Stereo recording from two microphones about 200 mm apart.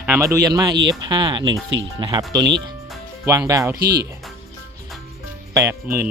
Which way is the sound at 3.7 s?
50° right (ahead or behind).